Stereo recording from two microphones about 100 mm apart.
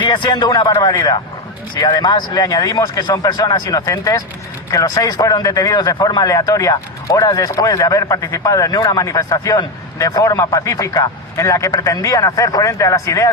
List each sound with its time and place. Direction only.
0.0 s a man's voice: 50° left (ahead or behind); by 13.3 s 35° left (ahead or behind)